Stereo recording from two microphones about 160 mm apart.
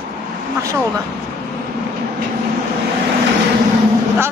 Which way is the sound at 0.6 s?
20° right (ahead or behind).